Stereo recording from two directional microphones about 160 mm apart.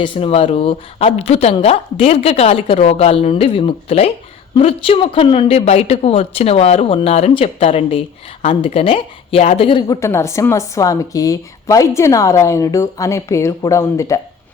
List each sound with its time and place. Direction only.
0.0 s speech: 35° left (ahead or behind)
10.0 s speech: 15° left (ahead or behind)